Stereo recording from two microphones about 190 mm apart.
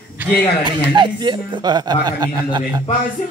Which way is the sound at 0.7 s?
25° right (ahead or behind).